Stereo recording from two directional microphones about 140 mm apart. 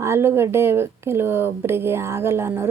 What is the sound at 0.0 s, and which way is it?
A woman's voice, 15° right (ahead or behind).